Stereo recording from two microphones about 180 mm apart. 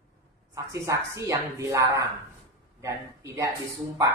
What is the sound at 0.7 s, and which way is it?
Speech, 15° right (ahead or behind).